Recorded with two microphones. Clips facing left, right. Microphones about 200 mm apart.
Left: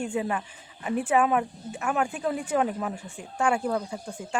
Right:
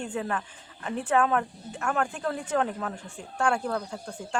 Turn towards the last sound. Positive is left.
turn(degrees=10)  # may be behind; listen again after turning